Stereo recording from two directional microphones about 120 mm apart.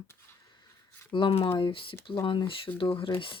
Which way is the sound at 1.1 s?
50° left (ahead or behind).